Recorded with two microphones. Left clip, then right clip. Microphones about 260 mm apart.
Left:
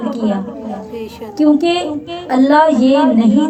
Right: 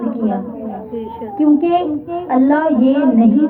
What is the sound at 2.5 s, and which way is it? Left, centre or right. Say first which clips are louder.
Speech: left 4 dB; left.